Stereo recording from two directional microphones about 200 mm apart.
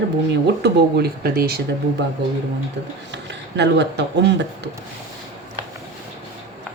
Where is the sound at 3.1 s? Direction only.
60° right (ahead or behind).